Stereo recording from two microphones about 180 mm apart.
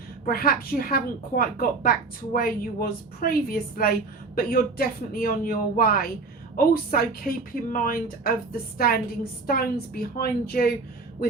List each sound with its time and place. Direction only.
0.3 s a woman's voice: 55° left (ahead or behind)
9.5 s a woman's voice: 55° left (ahead or behind)